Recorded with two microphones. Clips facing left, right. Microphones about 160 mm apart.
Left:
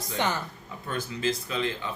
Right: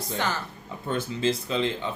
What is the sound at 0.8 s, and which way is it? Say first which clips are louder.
Speech: right 3 dB; 25° right (ahead or behind).